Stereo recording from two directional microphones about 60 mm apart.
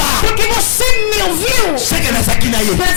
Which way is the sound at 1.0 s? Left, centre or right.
Left.